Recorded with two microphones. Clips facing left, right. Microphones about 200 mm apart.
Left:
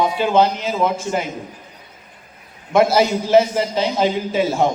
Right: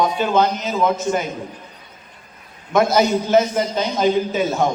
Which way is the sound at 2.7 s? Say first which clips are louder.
Left 1 dB; 30° left (ahead or behind).